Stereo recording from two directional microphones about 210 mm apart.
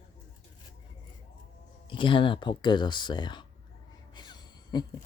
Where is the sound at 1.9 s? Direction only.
25° left (ahead or behind).